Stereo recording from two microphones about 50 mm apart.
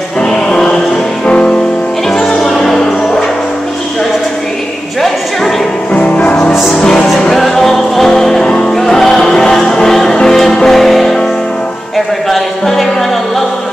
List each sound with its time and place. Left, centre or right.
0.2 s music: centre
2.0 s music: centre
5.9 s music: left
6.8 s music: centre
12.3 s music: centre